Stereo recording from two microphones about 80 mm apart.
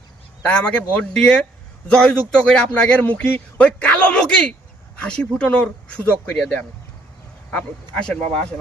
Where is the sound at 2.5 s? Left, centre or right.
Centre.